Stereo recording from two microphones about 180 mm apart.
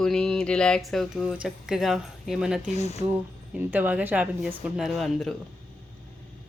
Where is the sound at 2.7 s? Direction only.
40° left (ahead or behind).